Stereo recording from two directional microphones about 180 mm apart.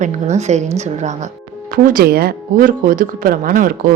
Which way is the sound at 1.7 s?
50° right (ahead or behind).